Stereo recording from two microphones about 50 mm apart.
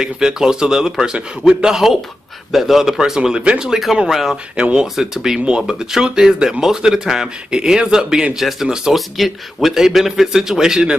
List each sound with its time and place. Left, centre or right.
0.0 s a man's voice: centre
4.6 s speech: right
4.9 s a man's voice: centre
8.9 s a man's voice: centre